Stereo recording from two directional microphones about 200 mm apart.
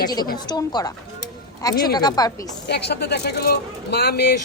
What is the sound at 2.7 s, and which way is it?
Speech, 55° left (ahead or behind).